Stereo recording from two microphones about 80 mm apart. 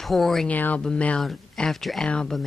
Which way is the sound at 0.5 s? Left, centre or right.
Centre.